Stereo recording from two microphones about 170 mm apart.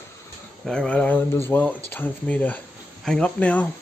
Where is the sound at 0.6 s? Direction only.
5° left (ahead or behind).